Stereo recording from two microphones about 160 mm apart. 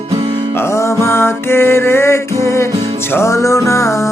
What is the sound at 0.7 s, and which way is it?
Music, 15° left (ahead or behind).